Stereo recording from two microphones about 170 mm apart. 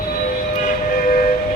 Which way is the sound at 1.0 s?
60° left (ahead or behind).